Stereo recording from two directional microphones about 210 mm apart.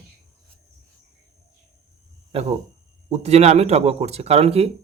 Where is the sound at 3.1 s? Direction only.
30° right (ahead or behind).